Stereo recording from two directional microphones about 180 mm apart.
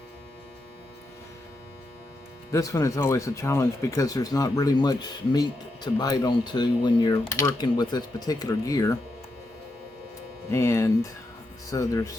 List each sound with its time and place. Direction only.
2.5 s speech: 15° left (ahead or behind)
10.5 s speech: 15° left (ahead or behind)